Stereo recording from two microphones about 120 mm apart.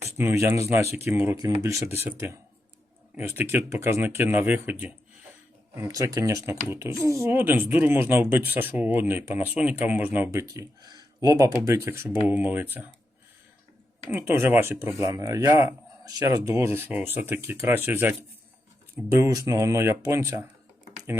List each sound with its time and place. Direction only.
0.0 s speech: 20° right (ahead or behind)
1.4 s speech: 30° right (ahead or behind)
5.9 s speech: 30° right (ahead or behind)
10.4 s speech: 30° right (ahead or behind)
14.1 s speech: 20° right (ahead or behind)